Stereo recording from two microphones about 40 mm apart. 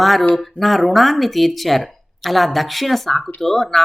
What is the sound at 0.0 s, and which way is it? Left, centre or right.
Speech, centre.